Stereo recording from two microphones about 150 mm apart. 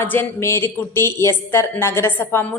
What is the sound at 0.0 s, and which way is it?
Speech, 15° left (ahead or behind).